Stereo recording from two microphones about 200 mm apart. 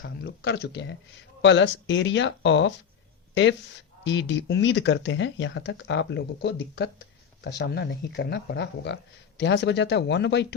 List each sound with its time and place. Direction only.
0.0 s speech: 55° left (ahead or behind)
4.0 s speech: 65° left (ahead or behind)